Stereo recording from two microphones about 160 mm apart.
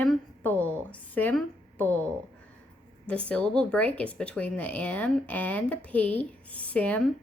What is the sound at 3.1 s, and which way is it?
Speech, 5° left (ahead or behind).